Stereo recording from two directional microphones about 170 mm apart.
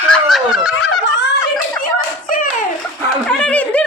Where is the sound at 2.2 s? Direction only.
55° left (ahead or behind).